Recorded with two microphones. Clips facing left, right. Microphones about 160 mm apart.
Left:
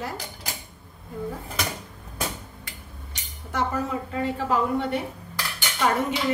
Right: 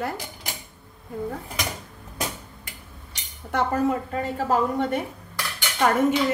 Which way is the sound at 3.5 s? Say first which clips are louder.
Right 4 dB; 55° right (ahead or behind).